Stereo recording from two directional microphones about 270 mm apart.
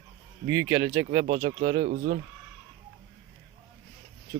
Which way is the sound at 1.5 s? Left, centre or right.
Right.